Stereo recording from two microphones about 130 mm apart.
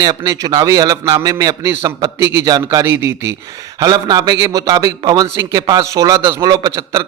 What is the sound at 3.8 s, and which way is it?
A man's voice, 30° right (ahead or behind).